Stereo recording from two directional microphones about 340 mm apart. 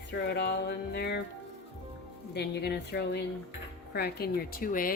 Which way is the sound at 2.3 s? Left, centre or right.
Left.